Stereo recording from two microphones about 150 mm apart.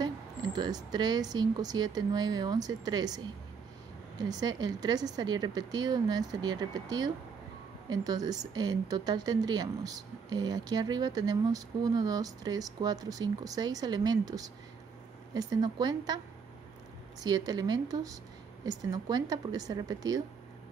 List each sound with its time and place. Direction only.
0.0 s a sound: 25° right (ahead or behind)
0.9 s speech: 30° right (ahead or behind)
4.2 s speech: 25° right (ahead or behind)
17.2 s speech: 25° right (ahead or behind)